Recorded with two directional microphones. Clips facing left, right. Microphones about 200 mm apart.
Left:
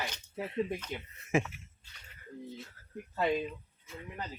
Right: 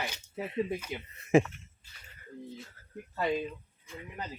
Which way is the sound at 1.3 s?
35° right (ahead or behind).